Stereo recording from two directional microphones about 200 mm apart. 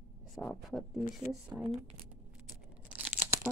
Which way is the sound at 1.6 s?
30° right (ahead or behind).